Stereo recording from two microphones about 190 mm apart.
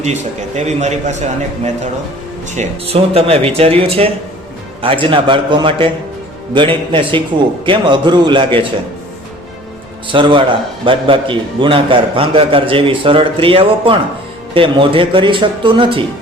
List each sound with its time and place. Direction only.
0.0 s a man's voice: 35° right (ahead or behind)
10.1 s a man's voice: 25° right (ahead or behind)